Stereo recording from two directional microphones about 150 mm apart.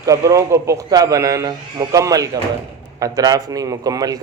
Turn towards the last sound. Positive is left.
turn(degrees=-25)  # may be behind; listen again after turning